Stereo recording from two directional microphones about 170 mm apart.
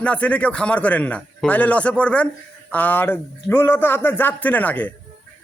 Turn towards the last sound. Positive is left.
turn(degrees=10)  # may be behind; listen again after turning